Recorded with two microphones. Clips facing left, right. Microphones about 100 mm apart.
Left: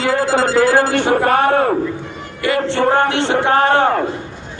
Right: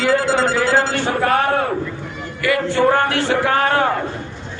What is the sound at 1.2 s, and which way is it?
Speech, 35° left (ahead or behind).